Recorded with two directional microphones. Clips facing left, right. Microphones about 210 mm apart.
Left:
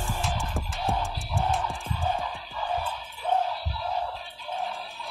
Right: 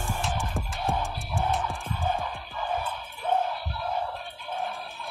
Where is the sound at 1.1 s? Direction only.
55° right (ahead or behind).